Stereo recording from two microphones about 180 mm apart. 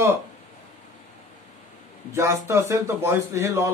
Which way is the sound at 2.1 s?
15° right (ahead or behind).